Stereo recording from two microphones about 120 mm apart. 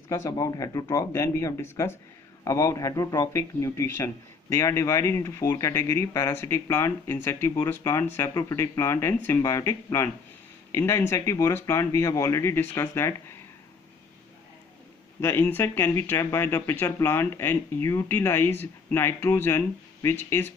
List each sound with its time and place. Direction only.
0.1 s speech: 30° left (ahead or behind)
15.1 s speech: 20° left (ahead or behind)